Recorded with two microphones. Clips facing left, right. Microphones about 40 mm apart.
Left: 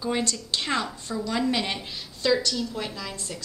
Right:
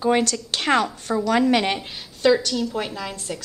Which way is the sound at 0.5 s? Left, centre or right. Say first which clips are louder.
Right 8 dB; right.